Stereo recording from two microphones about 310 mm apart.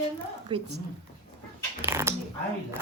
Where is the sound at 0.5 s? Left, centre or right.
Centre.